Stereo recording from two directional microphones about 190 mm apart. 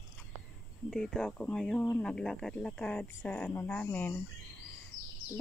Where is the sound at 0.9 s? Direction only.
5° left (ahead or behind).